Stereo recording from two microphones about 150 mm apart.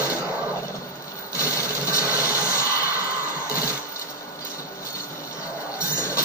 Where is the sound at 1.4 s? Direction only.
20° left (ahead or behind).